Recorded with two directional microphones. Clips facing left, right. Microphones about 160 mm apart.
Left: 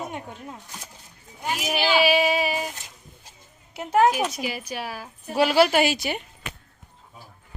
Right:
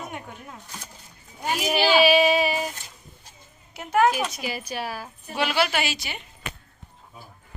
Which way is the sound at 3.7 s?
25° left (ahead or behind).